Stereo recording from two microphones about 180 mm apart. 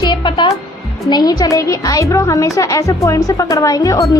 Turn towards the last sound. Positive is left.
turn(degrees=20)  # may be behind; listen again after turning